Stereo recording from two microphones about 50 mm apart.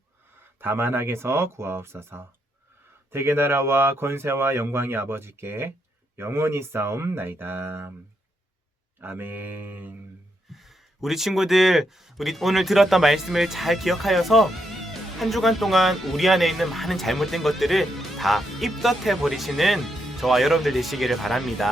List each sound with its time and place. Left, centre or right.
0.6 s speech: right
7.2 s speech: right
9.0 s mantra: right
10.5 s speech: centre